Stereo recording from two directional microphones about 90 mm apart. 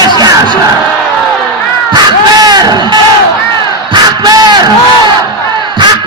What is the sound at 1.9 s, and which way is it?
Crowd, 50° right (ahead or behind).